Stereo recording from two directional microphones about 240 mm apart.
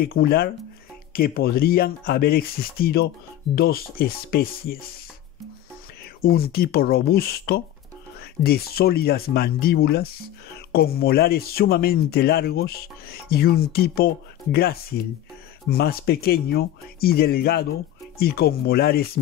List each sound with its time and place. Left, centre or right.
0.0 s speech: left
6.2 s speech: left